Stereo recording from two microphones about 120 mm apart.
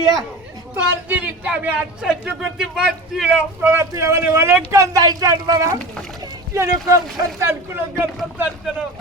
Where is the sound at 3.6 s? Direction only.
20° right (ahead or behind).